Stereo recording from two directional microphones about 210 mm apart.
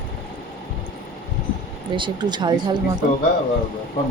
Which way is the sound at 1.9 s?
20° right (ahead or behind).